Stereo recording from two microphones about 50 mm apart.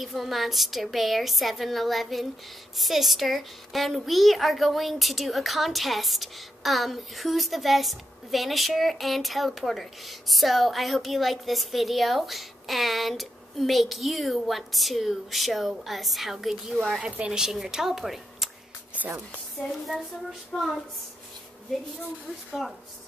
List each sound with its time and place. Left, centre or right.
0.0 s a woman's voice: centre
17.0 s speech: right
17.4 s a woman's voice: centre
19.0 s a sound: right
20.5 s a woman's voice: centre